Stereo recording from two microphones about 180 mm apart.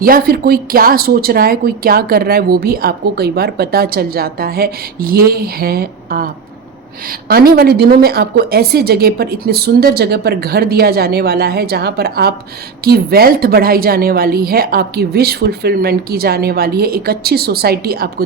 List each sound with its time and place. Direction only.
0.0 s a woman's voice: 55° right (ahead or behind)